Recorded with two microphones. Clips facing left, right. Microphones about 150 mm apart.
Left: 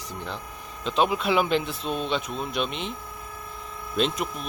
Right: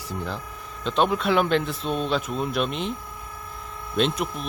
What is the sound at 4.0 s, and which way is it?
Speech, centre (ahead or behind).